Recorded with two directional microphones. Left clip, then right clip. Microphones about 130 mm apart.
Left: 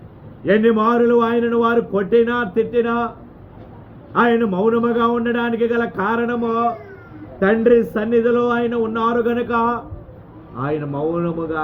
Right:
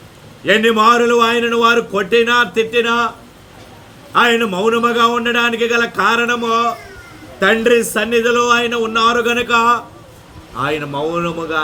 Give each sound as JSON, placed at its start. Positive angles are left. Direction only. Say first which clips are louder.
{"t": 0.4, "sound": "a man's voice", "louder": "right 5 dB", "side_deg": -20}
{"t": 4.1, "sound": "a man's voice", "louder": "right 4 dB", "side_deg": -20}